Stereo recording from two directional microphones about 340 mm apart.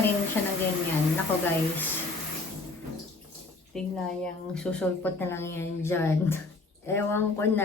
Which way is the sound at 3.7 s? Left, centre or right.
Centre.